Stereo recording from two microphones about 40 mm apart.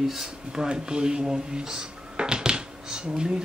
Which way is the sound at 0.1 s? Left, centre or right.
Centre.